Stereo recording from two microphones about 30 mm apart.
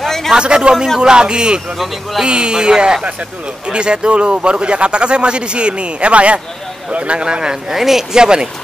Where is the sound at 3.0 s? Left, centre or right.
Right.